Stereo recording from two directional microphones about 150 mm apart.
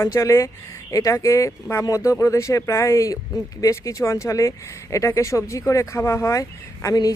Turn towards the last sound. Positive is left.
turn(degrees=25)  # may be behind; listen again after turning